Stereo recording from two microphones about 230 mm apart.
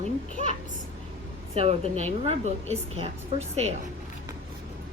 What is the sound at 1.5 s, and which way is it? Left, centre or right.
A woman's voice, right.